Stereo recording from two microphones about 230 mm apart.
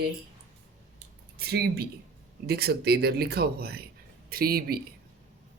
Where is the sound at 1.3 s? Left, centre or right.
Right.